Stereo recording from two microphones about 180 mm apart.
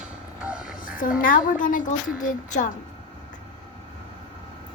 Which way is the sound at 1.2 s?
50° left (ahead or behind).